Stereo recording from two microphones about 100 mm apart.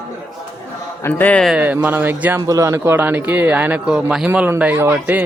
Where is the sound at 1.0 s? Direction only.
15° left (ahead or behind).